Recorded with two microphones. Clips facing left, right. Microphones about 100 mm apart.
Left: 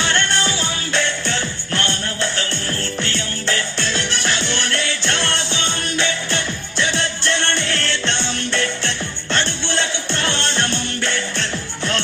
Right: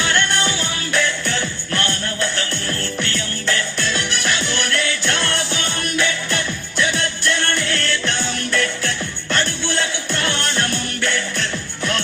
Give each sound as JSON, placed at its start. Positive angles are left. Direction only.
{"t": 0.0, "sound": "music", "side_deg": 30}